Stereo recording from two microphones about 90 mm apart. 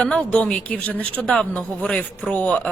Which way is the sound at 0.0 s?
10° left (ahead or behind).